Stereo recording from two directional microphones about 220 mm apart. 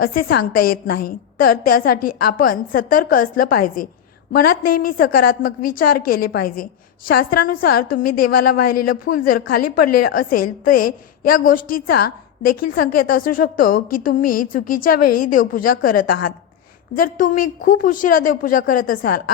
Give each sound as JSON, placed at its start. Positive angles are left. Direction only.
{"t": 0.0, "sound": "a woman's voice", "side_deg": 40}